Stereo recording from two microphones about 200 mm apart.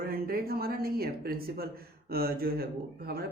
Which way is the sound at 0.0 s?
45° right (ahead or behind).